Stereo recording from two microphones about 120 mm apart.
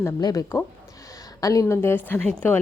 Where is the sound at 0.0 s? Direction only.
30° left (ahead or behind).